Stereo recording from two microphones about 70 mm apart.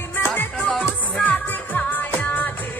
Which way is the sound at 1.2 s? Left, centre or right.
Left.